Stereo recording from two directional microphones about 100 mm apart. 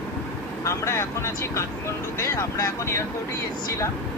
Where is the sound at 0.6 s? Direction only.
30° left (ahead or behind).